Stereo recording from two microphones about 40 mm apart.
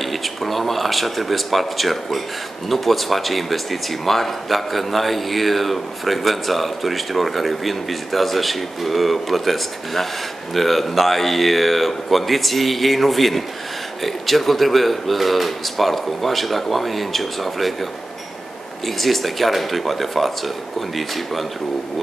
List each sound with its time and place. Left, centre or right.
0.0 s speech: centre
18.9 s speech: centre